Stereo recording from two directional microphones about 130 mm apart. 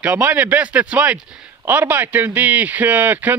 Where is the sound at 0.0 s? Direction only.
10° right (ahead or behind).